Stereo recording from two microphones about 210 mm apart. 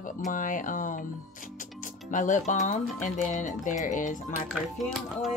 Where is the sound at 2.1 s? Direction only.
35° left (ahead or behind).